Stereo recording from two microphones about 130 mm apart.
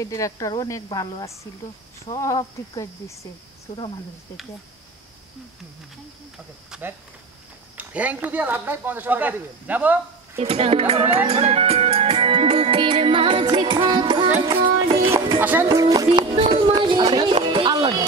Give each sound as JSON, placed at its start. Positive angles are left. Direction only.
{"t": 0.0, "sound": "speech", "side_deg": 25}
{"t": 3.7, "sound": "speech", "side_deg": 35}
{"t": 6.7, "sound": "cricket", "side_deg": -5}
{"t": 7.7, "sound": "speech", "side_deg": -10}
{"t": 10.3, "sound": "a child's voice", "side_deg": -50}
{"t": 11.2, "sound": "music", "side_deg": -50}
{"t": 15.0, "sound": "music", "side_deg": -25}